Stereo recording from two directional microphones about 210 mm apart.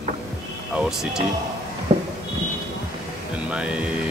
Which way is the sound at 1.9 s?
30° right (ahead or behind).